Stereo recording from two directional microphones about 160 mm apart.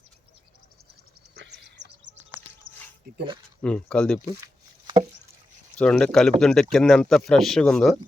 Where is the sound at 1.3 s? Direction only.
90° right.